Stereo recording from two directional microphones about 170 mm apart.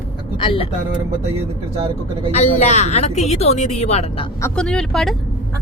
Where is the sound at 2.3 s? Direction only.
40° left (ahead or behind).